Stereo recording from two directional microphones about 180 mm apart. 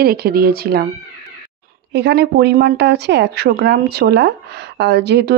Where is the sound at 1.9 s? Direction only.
70° right (ahead or behind).